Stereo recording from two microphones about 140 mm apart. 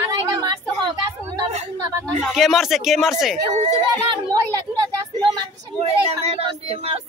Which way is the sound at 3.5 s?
50° right (ahead or behind).